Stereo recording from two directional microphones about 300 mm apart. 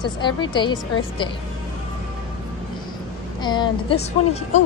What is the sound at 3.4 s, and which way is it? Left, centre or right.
Speech, centre.